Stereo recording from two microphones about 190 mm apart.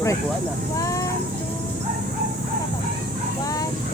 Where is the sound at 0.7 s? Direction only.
15° left (ahead or behind).